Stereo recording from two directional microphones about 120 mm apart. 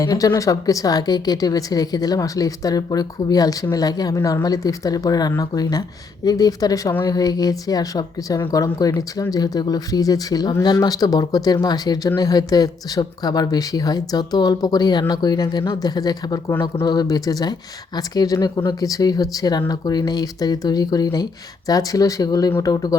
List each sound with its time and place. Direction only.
0.0 s speech: 30° left (ahead or behind)